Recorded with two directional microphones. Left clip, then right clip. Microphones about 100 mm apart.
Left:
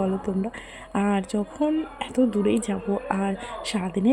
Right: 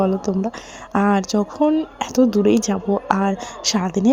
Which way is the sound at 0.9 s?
45° right (ahead or behind).